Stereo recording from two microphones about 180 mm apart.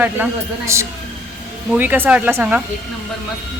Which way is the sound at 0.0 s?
15° right (ahead or behind).